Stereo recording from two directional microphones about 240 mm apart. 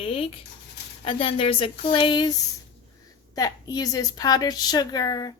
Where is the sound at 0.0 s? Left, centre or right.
Left.